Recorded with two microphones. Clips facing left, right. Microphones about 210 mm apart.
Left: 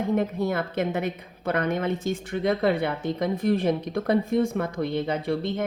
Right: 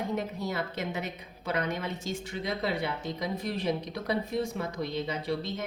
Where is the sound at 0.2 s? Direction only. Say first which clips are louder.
Left 7 dB; 55° left (ahead or behind).